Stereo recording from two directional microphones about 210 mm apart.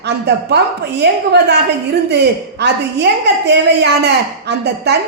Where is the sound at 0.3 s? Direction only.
55° right (ahead or behind).